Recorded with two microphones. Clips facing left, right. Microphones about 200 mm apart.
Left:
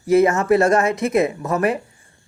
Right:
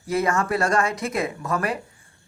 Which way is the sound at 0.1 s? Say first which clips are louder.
Left 8 dB; 25° left (ahead or behind).